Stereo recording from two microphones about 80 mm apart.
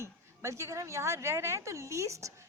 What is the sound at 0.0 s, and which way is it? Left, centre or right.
A woman's voice, right.